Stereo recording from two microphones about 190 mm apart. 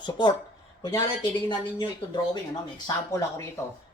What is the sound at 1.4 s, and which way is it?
Speech, 25° left (ahead or behind).